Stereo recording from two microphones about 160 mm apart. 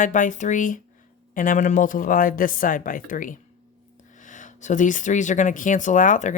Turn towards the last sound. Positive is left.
turn(degrees=50)  # may be behind; listen again after turning